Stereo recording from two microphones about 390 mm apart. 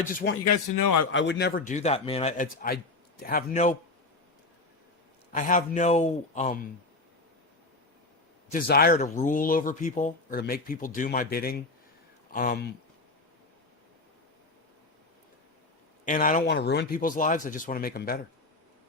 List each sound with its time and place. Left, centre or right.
0.1 s speech: left
0.4 s a man's voice: left
1.1 s speech: left
5.3 s speech: centre
8.5 s speech: left
16.0 s speech: centre